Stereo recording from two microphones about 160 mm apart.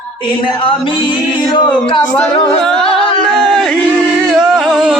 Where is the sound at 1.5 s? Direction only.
30° left (ahead or behind).